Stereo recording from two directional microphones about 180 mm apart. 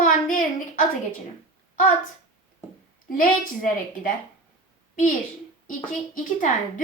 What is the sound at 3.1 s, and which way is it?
A woman's voice, 50° left (ahead or behind).